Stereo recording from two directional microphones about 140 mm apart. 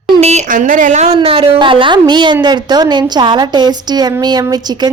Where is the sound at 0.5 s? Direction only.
70° right (ahead or behind).